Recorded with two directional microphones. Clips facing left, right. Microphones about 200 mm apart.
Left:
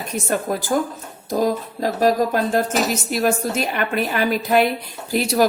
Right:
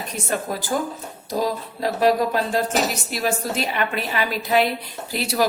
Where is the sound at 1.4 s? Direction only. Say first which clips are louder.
Left 3 dB; 45° left (ahead or behind).